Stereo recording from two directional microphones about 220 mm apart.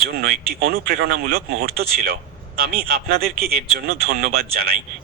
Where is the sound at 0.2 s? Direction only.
45° right (ahead or behind).